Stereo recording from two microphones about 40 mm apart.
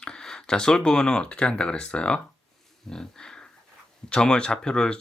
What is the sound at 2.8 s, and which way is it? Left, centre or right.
Speech, centre.